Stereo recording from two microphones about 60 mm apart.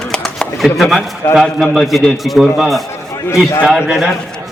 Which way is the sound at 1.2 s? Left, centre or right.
Left.